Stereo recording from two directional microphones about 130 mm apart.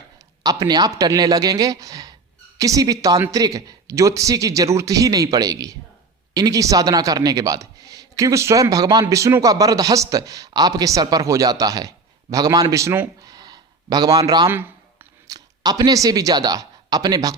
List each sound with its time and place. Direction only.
0.4 s speech: 30° right (ahead or behind)
13.3 s a sound: 30° right (ahead or behind)
15.3 s speech: 30° right (ahead or behind)